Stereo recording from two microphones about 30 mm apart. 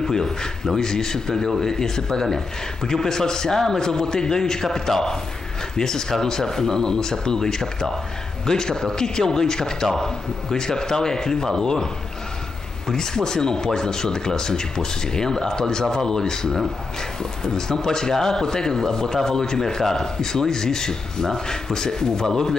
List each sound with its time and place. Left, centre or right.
0.0 s a man's voice: centre